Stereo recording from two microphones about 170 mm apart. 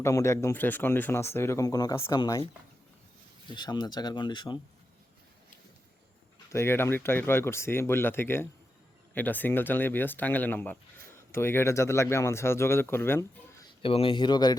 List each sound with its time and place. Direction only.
0.0 s speech: 15° left (ahead or behind)
3.5 s speech: 25° left (ahead or behind)
6.5 s speech: 15° left (ahead or behind)
13.8 s speech: 30° left (ahead or behind)